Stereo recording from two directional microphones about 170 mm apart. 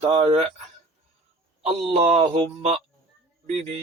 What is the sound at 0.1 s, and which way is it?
Speech, 30° right (ahead or behind).